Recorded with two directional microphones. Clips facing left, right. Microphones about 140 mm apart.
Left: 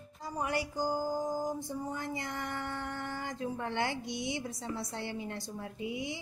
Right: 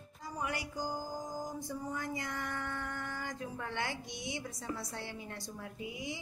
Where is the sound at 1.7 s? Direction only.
30° left (ahead or behind).